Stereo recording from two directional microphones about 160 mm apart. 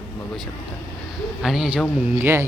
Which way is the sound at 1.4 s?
Centre (ahead or behind).